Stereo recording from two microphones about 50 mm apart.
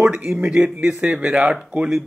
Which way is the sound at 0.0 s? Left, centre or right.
Centre.